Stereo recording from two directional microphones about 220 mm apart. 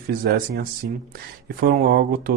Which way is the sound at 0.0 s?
40° right (ahead or behind).